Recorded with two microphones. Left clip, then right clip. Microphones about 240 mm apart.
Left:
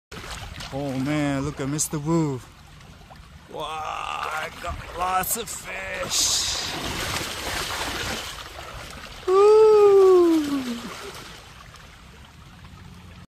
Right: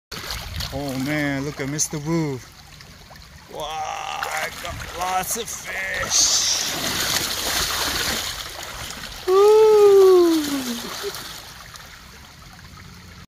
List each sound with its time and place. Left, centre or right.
0.1 s splash: right
0.7 s speech: centre
3.5 s boat: centre
6.6 s splash: right
9.3 s a sound: centre
10.3 s a sound: right